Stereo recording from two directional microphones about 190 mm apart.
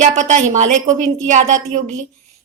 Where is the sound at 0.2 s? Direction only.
40° right (ahead or behind).